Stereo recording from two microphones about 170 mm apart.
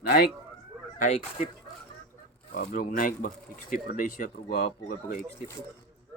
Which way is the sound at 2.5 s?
60° left (ahead or behind).